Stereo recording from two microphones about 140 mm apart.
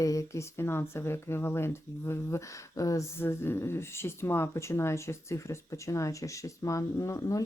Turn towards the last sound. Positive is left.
turn(degrees=25)  # may be behind; listen again after turning